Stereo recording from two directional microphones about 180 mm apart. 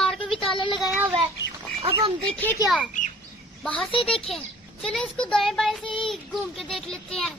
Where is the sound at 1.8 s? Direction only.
30° right (ahead or behind).